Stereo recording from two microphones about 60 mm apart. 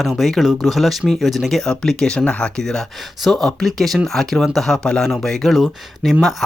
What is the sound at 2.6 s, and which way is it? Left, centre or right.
Speech, centre.